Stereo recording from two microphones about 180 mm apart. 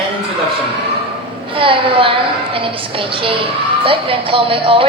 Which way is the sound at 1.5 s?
30° right (ahead or behind).